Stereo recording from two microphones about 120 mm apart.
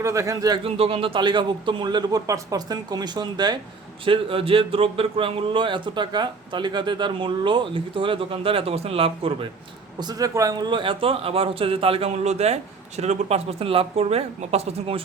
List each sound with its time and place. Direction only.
0.0 s speech: 25° right (ahead or behind)
0.6 s a man's voice: 50° right (ahead or behind); by 3.6 s 35° right (ahead or behind)
4.0 s speech: 45° right (ahead or behind)
10.0 s speech: 30° right (ahead or behind); by 15.0 s 55° right (ahead or behind)